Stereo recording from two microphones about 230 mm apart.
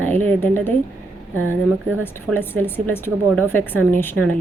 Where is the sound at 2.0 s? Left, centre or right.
Centre.